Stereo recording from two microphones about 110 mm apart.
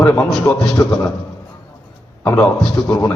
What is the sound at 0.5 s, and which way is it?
Speech, 30° left (ahead or behind).